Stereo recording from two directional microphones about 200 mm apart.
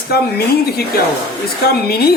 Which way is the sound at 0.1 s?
50° left (ahead or behind).